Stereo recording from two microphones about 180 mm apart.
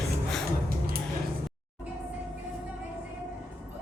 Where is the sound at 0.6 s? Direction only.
55° right (ahead or behind).